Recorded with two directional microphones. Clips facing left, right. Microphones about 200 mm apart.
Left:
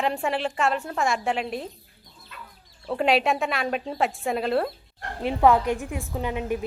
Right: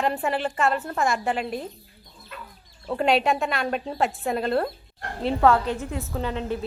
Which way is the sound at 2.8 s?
Centre (ahead or behind).